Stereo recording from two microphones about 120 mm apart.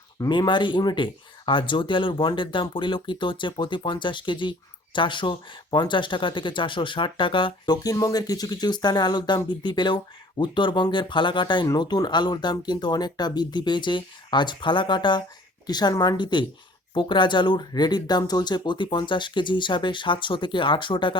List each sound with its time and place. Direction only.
0.2 s speech: 40° left (ahead or behind)